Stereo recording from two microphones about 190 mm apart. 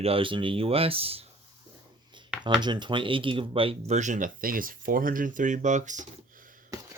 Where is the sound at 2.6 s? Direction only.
25° right (ahead or behind); by 6.0 s 40° right (ahead or behind).